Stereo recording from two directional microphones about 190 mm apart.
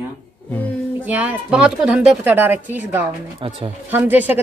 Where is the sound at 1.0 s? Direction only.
10° right (ahead or behind).